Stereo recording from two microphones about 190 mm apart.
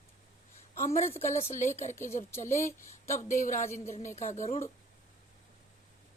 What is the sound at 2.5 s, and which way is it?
Speech, 15° left (ahead or behind).